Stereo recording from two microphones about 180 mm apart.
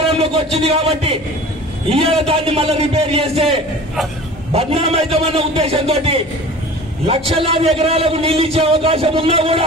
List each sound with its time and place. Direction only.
0.0 s a man's voice: 30° right (ahead or behind)
4.5 s a man's voice: 35° right (ahead or behind)